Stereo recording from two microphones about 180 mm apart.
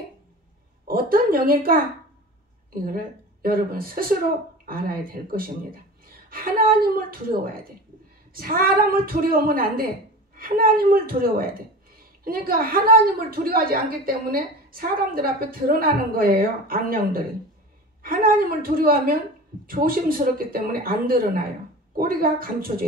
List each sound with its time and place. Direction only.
0.8 s a sound: 55° right (ahead or behind)
2.7 s a woman's voice: 55° right (ahead or behind)
8.3 s a woman's voice: 55° right (ahead or behind)